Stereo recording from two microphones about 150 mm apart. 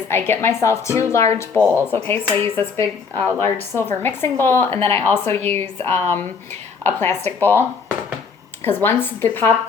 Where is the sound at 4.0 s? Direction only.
15° left (ahead or behind).